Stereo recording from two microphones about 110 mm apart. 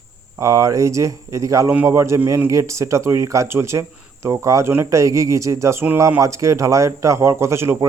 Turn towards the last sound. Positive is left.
turn(degrees=-25)  # may be behind; listen again after turning